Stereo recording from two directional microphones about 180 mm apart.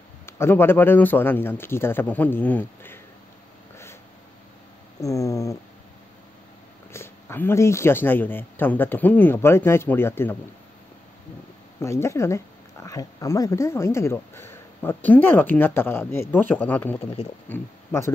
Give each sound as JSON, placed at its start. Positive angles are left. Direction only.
{"t": 0.3, "sound": "speech", "side_deg": 15}
{"t": 5.0, "sound": "speech", "side_deg": 15}
{"t": 6.9, "sound": "speech", "side_deg": 15}
{"t": 11.8, "sound": "speech", "side_deg": 15}
{"t": 17.0, "sound": "speech", "side_deg": 35}
{"t": 17.5, "sound": "speech", "side_deg": 15}